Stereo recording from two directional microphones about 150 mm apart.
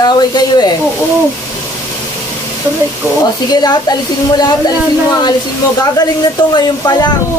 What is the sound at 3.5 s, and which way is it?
Speech, 25° left (ahead or behind).